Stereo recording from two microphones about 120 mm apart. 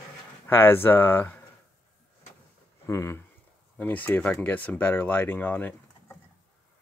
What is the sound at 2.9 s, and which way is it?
Speech, 25° left (ahead or behind).